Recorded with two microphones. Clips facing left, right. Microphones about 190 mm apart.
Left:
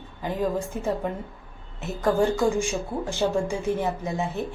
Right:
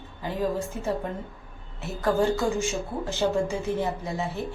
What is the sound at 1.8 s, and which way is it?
Speech, 15° left (ahead or behind).